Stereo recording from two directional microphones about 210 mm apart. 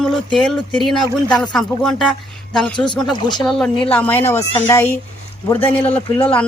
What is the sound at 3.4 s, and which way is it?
Speech, centre (ahead or behind).